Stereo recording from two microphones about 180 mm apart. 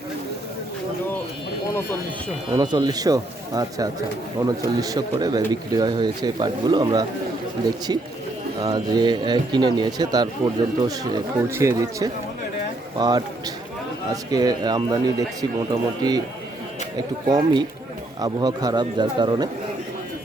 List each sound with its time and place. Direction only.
2.6 s speech: 25° right (ahead or behind)
8.6 s speech: 25° right (ahead or behind)
17.2 s speech: 25° right (ahead or behind)